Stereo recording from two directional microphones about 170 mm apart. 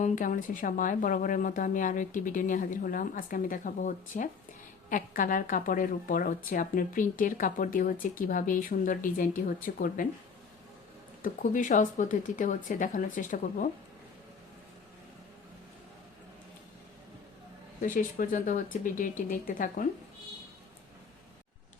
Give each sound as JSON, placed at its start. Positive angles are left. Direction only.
{"t": 0.0, "sound": "a woman's voice", "side_deg": 50}
{"t": 11.2, "sound": "a woman's voice", "side_deg": 50}
{"t": 17.8, "sound": "a woman's voice", "side_deg": 50}